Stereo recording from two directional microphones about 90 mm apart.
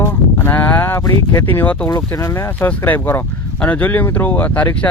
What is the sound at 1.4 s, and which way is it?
Speech, 20° left (ahead or behind).